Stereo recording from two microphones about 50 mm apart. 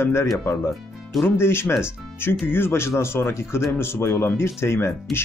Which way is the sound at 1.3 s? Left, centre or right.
Left.